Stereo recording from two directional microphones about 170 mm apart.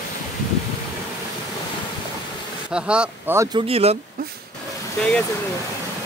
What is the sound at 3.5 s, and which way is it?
Speech, 35° right (ahead or behind).